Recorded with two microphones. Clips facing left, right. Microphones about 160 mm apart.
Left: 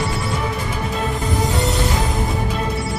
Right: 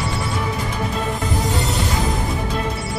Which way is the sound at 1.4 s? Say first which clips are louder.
Left 2 dB; centre (ahead or behind).